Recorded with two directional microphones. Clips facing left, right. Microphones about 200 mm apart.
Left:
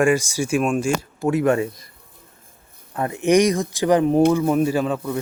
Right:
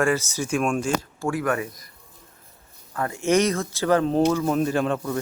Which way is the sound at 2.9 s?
20° left (ahead or behind).